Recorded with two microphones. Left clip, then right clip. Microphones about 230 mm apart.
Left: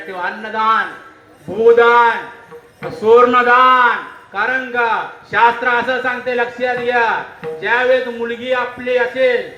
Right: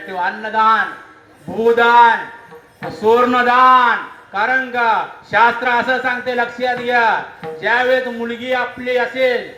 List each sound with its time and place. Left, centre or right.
0.1 s a man's voice: right